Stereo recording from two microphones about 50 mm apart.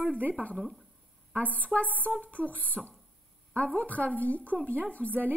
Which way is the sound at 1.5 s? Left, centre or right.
Left.